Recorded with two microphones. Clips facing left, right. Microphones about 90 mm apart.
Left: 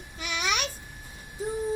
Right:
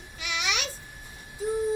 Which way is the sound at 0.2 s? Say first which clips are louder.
Left 2 dB; 40° left (ahead or behind).